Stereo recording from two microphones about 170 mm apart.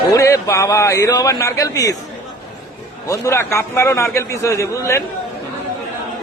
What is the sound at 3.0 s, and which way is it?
A man's voice, 20° left (ahead or behind).